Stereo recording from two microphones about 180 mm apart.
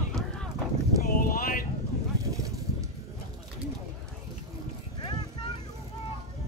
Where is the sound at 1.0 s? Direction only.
50° left (ahead or behind).